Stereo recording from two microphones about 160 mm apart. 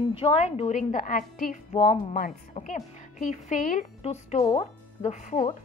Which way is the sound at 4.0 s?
45° left (ahead or behind).